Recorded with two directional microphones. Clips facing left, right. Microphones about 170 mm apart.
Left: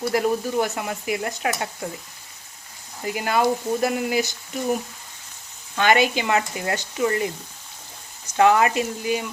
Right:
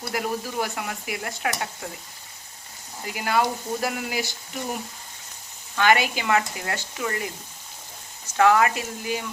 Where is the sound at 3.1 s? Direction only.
25° left (ahead or behind).